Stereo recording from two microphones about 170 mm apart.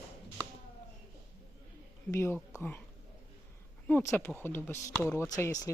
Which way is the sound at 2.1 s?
15° left (ahead or behind).